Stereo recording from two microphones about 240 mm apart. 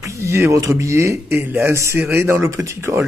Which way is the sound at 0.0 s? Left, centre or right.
Centre.